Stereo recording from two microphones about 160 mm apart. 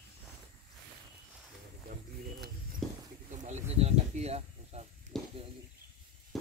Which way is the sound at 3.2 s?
50° right (ahead or behind).